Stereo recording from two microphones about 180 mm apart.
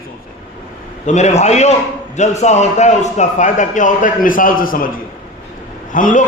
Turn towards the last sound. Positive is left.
turn(degrees=45)  # may be behind; listen again after turning